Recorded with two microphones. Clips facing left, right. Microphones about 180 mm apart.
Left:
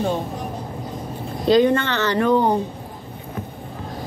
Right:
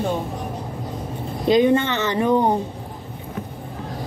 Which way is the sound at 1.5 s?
20° right (ahead or behind).